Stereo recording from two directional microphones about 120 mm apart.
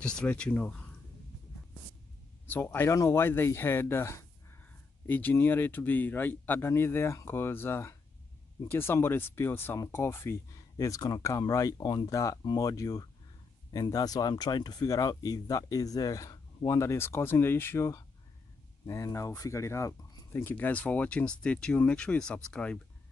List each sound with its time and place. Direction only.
0.0 s speech: 10° left (ahead or behind)
2.4 s speech: 15° left (ahead or behind)